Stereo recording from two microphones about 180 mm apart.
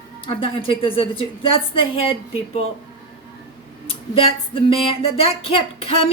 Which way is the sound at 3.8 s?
30° left (ahead or behind).